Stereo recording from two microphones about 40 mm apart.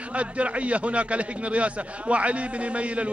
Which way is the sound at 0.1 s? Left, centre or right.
Right.